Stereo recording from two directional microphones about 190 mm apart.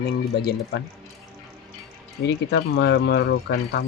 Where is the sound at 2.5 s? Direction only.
70° left (ahead or behind).